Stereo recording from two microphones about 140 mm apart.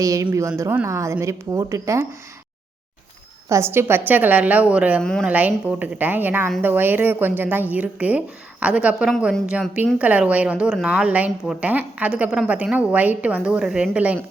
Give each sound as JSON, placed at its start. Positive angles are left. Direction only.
{"t": 0.0, "sound": "a woman's voice", "side_deg": -25}
{"t": 3.5, "sound": "a woman's voice", "side_deg": -15}